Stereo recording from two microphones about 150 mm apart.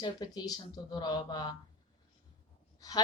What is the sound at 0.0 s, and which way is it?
Speech, 25° left (ahead or behind).